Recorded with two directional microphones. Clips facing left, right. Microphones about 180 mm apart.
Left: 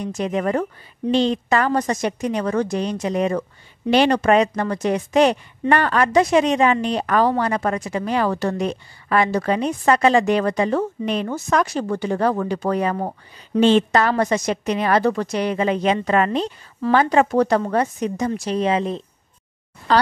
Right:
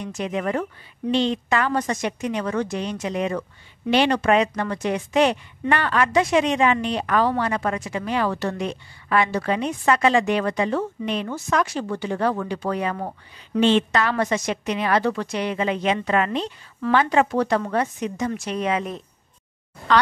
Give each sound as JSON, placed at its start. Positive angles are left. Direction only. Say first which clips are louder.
{"t": 0.0, "sound": "a woman's voice", "louder": "left 4 dB", "side_deg": 40}